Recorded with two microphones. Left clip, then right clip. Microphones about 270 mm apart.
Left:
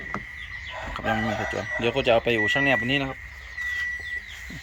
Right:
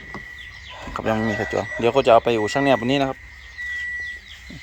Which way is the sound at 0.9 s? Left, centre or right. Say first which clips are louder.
Right 4 dB; centre.